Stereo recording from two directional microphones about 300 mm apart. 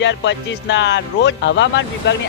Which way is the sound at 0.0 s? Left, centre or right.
Left.